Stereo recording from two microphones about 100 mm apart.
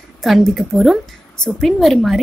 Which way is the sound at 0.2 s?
Centre (ahead or behind).